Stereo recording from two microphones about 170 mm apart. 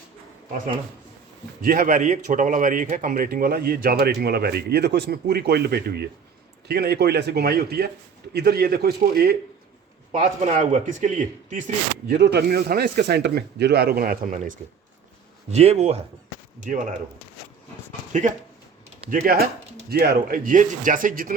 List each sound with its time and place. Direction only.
1.6 s a man's voice: 55° right (ahead or behind)
10.1 s speech: 45° right (ahead or behind)
12.0 s a man's voice: 75° right (ahead or behind); by 14.6 s 50° right (ahead or behind)
15.4 s speech: 40° right (ahead or behind)
16.6 s speech: 50° right (ahead or behind)
19.1 s a man's voice: 60° right (ahead or behind)